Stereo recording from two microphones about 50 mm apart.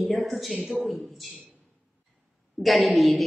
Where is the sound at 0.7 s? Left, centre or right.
Centre.